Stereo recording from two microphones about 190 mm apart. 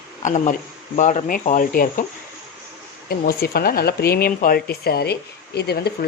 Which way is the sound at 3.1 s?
55° left (ahead or behind).